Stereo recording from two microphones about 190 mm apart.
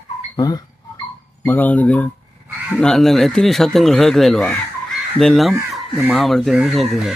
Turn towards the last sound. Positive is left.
turn(degrees=0)  # may be behind; listen again after turning